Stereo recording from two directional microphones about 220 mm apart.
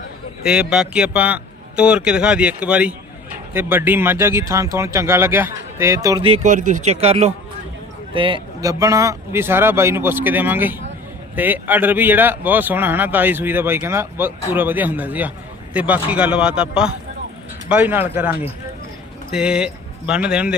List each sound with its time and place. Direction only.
0.4 s a man's voice: 5° right (ahead or behind)